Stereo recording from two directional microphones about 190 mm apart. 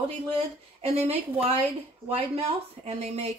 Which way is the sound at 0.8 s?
35° right (ahead or behind).